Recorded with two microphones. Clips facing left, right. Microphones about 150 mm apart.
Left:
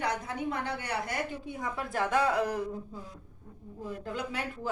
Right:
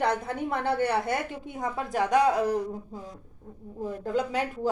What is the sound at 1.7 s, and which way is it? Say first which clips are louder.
Speech: right 5 dB; 15° right (ahead or behind).